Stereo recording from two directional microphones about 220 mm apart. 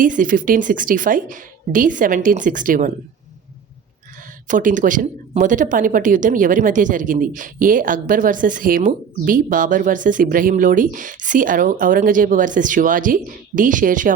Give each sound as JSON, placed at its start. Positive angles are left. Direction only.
{"t": 0.0, "sound": "speech", "side_deg": -35}
{"t": 4.4, "sound": "speech", "side_deg": -35}